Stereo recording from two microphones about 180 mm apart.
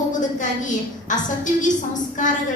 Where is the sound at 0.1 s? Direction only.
45° left (ahead or behind).